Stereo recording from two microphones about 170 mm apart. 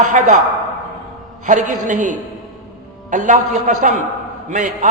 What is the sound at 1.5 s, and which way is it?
A man's voice, 45° right (ahead or behind).